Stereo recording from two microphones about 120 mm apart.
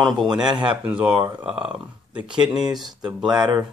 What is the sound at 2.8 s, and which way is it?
Speech, 35° right (ahead or behind).